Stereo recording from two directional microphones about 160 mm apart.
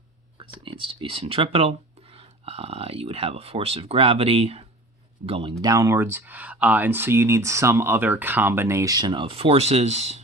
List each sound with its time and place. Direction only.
0.6 s speech: 30° right (ahead or behind)
5.6 s speech: 20° right (ahead or behind); by 10.2 s 45° right (ahead or behind)